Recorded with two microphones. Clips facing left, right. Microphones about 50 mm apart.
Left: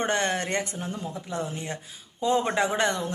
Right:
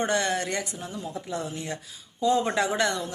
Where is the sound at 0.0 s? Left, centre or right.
Left.